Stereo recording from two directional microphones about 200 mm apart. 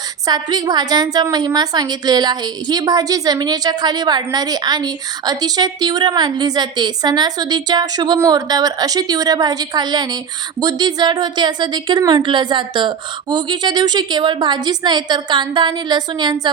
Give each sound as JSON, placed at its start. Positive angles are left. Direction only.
{"t": 0.3, "sound": "a woman's voice", "side_deg": -20}